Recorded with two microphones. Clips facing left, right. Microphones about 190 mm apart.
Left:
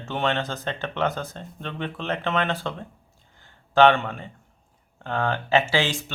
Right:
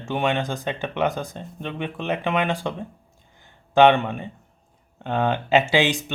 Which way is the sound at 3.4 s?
15° right (ahead or behind).